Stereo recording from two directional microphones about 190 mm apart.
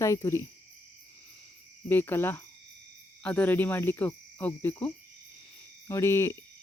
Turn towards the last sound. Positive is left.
turn(degrees=15)  # may be behind; listen again after turning